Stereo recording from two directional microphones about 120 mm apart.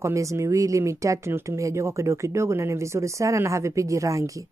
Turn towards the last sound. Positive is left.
turn(degrees=-25)  # may be behind; listen again after turning